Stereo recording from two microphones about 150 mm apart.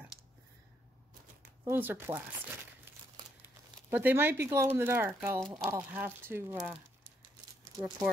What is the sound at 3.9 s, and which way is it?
Speech, 10° right (ahead or behind).